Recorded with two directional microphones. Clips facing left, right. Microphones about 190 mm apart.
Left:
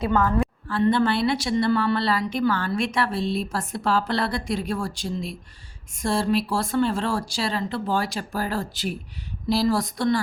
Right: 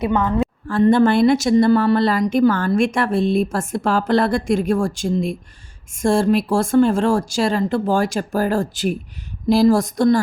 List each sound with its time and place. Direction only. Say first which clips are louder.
0.0 s a woman's voice: right 3 dB; 20° right (ahead or behind)
0.7 s a woman's voice: right 7 dB; 45° right (ahead or behind)